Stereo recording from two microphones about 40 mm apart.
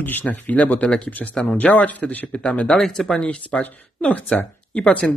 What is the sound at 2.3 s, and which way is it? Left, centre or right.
Speech, left.